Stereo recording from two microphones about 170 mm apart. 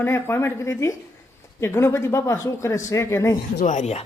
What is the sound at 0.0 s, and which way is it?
A man's voice, 15° left (ahead or behind).